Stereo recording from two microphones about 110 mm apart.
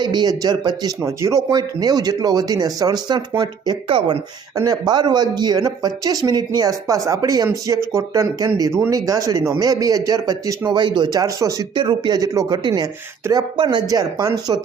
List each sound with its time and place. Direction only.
0.0 s speech: 40° right (ahead or behind)
3.8 s speech: 50° right (ahead or behind)
4.5 s speech: 35° right (ahead or behind)
11.7 s speech: 45° right (ahead or behind)